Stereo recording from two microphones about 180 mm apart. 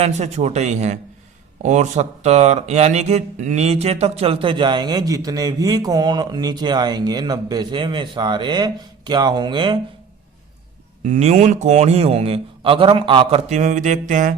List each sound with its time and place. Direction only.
0.0 s a man's voice: 40° right (ahead or behind)
11.0 s a man's voice: 40° right (ahead or behind)